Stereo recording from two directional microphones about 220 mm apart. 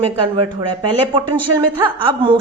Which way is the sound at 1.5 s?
10° right (ahead or behind).